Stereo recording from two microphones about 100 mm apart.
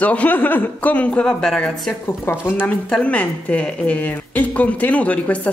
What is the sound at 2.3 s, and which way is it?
A woman's voice, 20° left (ahead or behind).